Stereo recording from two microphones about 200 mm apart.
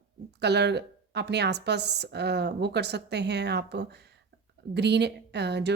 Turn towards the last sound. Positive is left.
turn(degrees=-55)  # may be behind; listen again after turning